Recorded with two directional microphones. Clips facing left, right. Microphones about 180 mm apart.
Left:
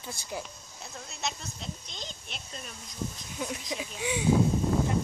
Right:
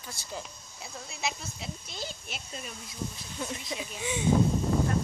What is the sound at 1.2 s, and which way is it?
Speech, 5° right (ahead or behind).